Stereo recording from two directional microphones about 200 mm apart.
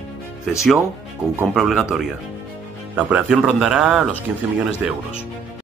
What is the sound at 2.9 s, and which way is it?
Speech, 5° right (ahead or behind).